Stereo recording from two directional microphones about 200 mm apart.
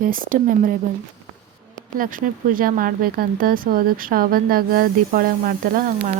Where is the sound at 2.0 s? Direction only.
45° right (ahead or behind).